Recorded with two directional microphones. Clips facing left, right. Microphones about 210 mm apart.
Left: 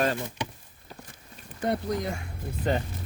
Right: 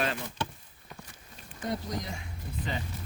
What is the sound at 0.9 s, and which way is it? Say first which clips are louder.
Walk: left 2 dB; 30° left (ahead or behind).